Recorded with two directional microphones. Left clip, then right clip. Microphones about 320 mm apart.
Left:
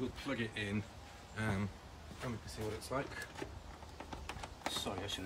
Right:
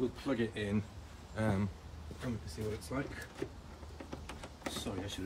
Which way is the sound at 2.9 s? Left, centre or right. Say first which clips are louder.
Left 1 dB; centre.